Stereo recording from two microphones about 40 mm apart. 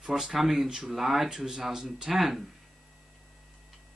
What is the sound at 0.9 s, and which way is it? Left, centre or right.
Speech, centre.